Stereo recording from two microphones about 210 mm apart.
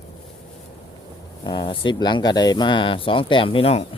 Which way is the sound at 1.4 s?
20° left (ahead or behind).